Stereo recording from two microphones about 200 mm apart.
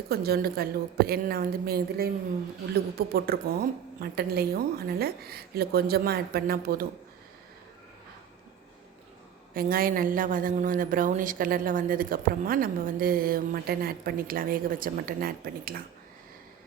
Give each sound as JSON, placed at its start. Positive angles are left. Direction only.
{"t": 0.1, "sound": "a woman's voice", "side_deg": -50}
{"t": 3.1, "sound": "a woman's voice", "side_deg": -50}
{"t": 9.6, "sound": "a woman's voice", "side_deg": -45}